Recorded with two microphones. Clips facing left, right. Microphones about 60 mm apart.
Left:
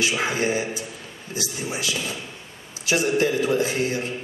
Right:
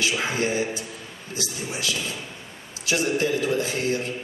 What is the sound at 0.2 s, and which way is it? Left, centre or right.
A man's voice, left.